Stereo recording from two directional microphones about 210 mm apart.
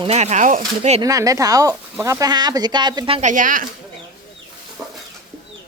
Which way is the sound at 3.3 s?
40° right (ahead or behind).